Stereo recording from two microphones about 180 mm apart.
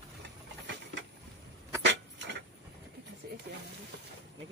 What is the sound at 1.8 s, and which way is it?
Rodents, 75° right (ahead or behind).